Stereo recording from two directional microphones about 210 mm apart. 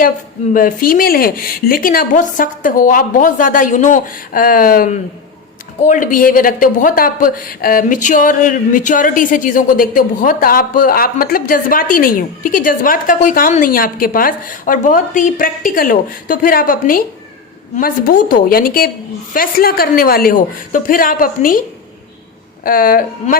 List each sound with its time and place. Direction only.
0.5 s a woman's voice: 40° left (ahead or behind)
22.6 s speech: 40° left (ahead or behind)